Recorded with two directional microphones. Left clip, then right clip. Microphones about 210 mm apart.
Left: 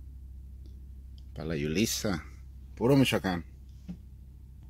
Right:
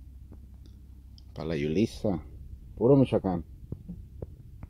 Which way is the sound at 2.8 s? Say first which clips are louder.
Right 3 dB; 40° left (ahead or behind).